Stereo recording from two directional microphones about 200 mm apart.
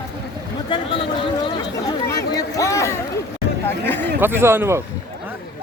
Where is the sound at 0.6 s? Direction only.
25° left (ahead or behind).